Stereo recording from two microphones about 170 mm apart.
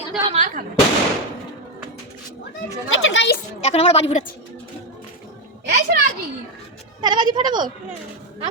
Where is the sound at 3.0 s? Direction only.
90° left.